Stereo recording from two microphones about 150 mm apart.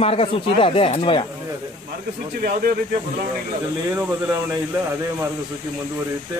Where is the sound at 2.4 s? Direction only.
70° right (ahead or behind).